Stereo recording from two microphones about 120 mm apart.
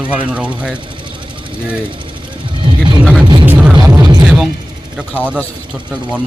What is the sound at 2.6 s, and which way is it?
Vehicle, 45° right (ahead or behind).